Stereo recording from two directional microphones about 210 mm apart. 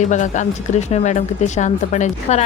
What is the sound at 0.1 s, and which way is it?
A woman's voice, 35° left (ahead or behind).